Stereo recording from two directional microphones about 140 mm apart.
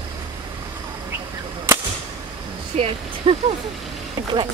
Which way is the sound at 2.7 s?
45° right (ahead or behind).